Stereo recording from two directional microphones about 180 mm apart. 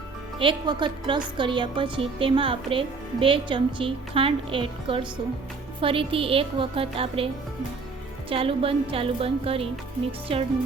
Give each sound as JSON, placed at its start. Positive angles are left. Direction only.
{"t": 0.3, "sound": "a woman's voice", "side_deg": -25}
{"t": 8.3, "sound": "a woman's voice", "side_deg": -30}